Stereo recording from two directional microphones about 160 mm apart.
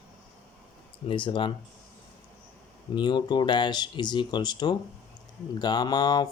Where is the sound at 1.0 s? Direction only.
30° left (ahead or behind).